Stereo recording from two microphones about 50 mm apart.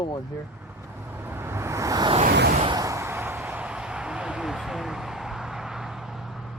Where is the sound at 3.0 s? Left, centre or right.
Right.